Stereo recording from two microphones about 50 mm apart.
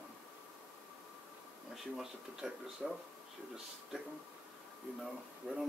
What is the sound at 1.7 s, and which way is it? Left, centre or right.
Speech, centre.